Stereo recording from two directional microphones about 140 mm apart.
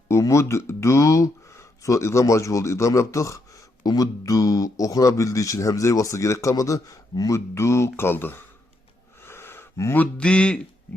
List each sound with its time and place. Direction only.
0.1 s speech: 20° left (ahead or behind)